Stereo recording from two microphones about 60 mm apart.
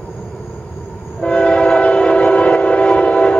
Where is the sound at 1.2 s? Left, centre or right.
Centre.